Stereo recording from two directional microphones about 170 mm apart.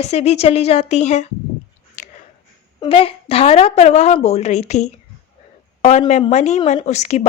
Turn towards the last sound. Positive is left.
turn(degrees=40)  # may be behind; listen again after turning